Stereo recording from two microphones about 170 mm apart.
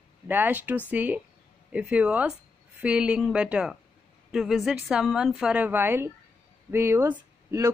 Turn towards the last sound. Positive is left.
turn(degrees=-15)  # may be behind; listen again after turning